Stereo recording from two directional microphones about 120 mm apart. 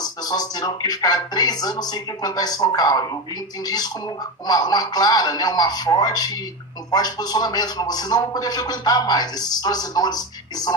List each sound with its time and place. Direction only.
0.0 s speech: 35° left (ahead or behind)